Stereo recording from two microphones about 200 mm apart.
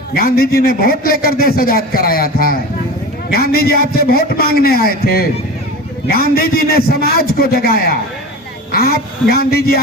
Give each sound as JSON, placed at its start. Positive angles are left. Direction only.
{"t": 0.1, "sound": "a man's voice", "side_deg": 50}
{"t": 6.3, "sound": "a man's voice", "side_deg": 50}